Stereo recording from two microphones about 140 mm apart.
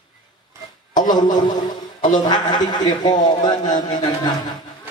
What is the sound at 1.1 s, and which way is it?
A man's voice, 30° left (ahead or behind).